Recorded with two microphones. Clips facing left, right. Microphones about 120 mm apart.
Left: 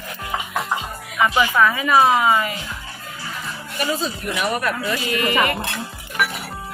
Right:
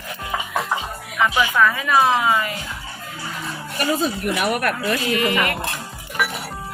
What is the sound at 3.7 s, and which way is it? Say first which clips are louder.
Speech: right 3 dB; 55° right (ahead or behind).